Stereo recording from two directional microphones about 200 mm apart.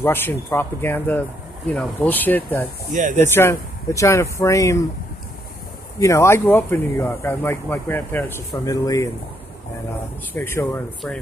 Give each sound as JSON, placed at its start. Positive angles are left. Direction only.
{"t": 0.0, "sound": "speech", "side_deg": 10}
{"t": 2.9, "sound": "speech", "side_deg": -40}
{"t": 3.2, "sound": "speech", "side_deg": 10}
{"t": 5.9, "sound": "speech", "side_deg": 15}
{"t": 10.3, "sound": "speech", "side_deg": 10}